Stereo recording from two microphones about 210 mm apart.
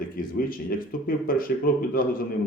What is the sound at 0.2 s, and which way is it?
Speech, 45° left (ahead or behind).